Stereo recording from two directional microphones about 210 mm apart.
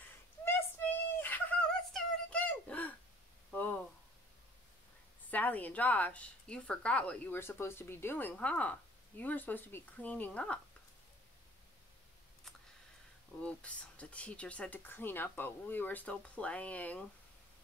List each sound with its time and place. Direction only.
1.2 s a sound: 10° left (ahead or behind)
5.3 s a woman's voice: 5° left (ahead or behind)
13.4 s a woman's voice: 5° left (ahead or behind)